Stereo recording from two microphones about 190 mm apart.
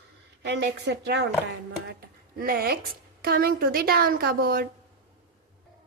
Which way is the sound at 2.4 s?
50° right (ahead or behind).